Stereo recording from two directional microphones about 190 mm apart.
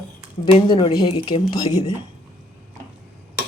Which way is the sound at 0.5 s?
25° left (ahead or behind).